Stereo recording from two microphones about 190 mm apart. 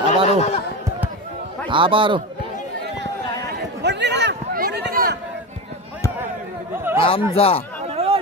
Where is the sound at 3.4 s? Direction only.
65° right (ahead or behind).